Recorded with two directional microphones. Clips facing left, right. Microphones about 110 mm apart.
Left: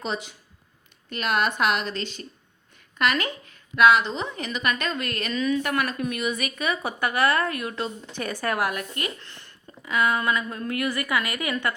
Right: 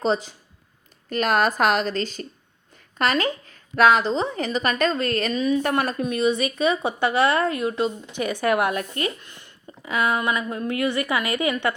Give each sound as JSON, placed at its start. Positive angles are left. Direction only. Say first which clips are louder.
{"t": 0.0, "sound": "a woman's voice", "louder": "right 8 dB", "side_deg": -35}
{"t": 5.3, "sound": "a woman's voice", "louder": "even", "side_deg": -25}
{"t": 9.2, "sound": "a sound", "louder": "right 2 dB", "side_deg": -15}
{"t": 9.9, "sound": "a woman's voice", "louder": "right 1 dB", "side_deg": -25}